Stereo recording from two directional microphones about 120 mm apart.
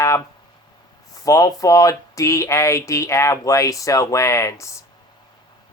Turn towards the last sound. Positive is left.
turn(degrees=25)  # may be behind; listen again after turning